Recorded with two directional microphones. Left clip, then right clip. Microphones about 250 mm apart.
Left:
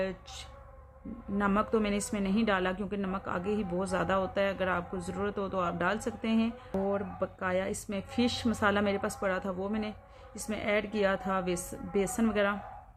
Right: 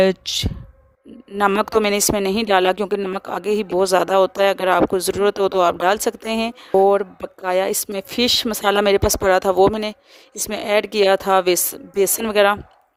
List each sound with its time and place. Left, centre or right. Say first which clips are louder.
0.0 s a woman's voice: right 19 dB; right